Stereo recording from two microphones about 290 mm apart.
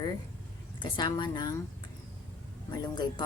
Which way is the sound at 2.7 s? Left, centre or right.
Centre.